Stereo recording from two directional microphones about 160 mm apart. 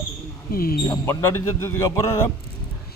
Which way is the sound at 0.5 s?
65° left (ahead or behind).